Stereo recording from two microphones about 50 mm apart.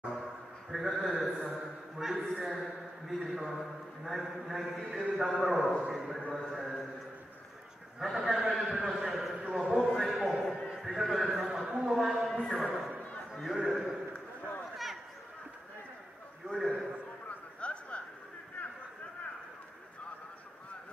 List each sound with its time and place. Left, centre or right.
0.1 s a man's voice: centre
8.0 s a man's voice: centre
16.4 s a man's voice: centre
17.6 s a sound: left